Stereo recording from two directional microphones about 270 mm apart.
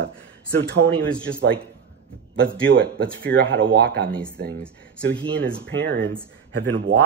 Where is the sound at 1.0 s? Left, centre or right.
Centre.